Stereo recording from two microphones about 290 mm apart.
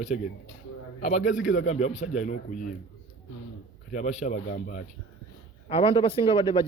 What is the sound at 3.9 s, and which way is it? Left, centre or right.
A man's voice, left.